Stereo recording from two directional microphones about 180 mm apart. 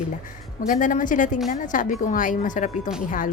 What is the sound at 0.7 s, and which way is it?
Speech, 45° left (ahead or behind).